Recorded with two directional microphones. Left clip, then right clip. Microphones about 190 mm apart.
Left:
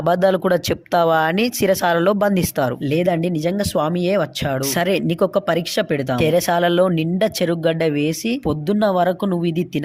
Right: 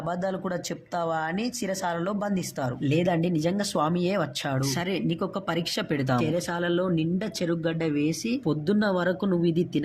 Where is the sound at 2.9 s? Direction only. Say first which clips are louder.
Left 6 dB; 30° left (ahead or behind).